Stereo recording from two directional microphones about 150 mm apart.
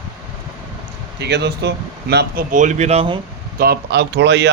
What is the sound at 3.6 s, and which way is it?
Speech, 90° right.